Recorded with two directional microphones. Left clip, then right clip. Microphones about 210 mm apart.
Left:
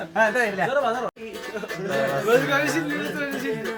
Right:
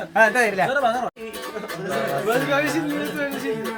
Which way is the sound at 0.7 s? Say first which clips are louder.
Right 2 dB; 30° right (ahead or behind).